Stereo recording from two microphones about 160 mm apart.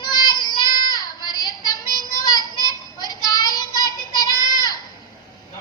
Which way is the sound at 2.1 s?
25° left (ahead or behind).